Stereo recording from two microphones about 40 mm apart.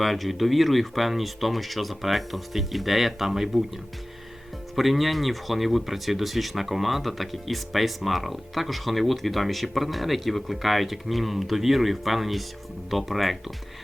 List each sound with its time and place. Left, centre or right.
0.0 s speech: centre
4.7 s speech: centre